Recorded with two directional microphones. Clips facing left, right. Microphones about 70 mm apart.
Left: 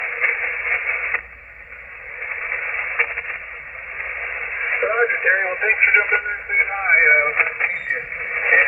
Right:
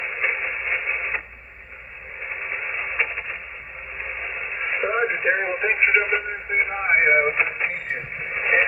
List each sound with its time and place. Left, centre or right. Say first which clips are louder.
0.0 s radio: left 3 dB; left
2.4 s radio: left 4 dB; left
4.2 s speech: left 3 dB; left